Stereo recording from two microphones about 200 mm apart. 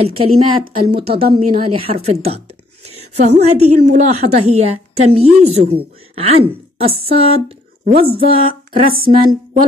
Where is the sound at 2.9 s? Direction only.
30° right (ahead or behind).